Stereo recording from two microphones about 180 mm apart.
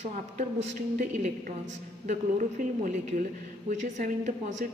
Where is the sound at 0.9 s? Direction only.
50° right (ahead or behind).